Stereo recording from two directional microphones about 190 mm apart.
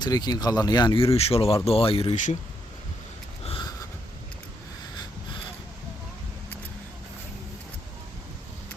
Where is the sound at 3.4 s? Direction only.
25° left (ahead or behind).